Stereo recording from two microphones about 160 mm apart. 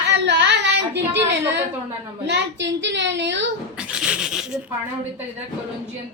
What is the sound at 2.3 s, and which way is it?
Speech, 90° right.